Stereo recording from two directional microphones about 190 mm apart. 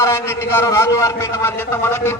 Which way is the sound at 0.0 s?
15° left (ahead or behind).